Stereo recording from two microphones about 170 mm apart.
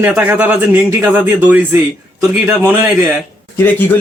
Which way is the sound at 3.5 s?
10° left (ahead or behind).